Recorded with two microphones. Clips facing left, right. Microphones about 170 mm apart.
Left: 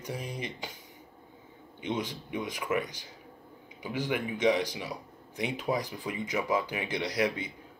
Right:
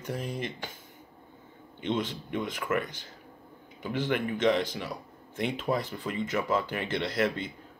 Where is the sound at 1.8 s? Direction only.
15° left (ahead or behind).